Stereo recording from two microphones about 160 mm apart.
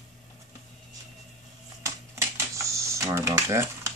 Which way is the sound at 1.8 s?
20° right (ahead or behind).